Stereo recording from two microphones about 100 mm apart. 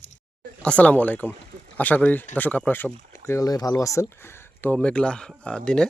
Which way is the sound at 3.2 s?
35° left (ahead or behind).